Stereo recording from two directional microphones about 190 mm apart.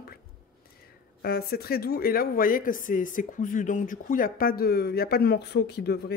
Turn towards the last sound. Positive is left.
turn(degrees=60)  # may be behind; listen again after turning